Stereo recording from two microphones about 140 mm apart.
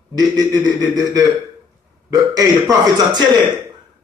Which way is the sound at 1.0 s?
25° right (ahead or behind).